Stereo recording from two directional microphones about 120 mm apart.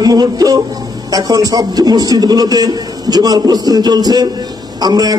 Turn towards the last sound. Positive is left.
turn(degrees=-35)  # may be behind; listen again after turning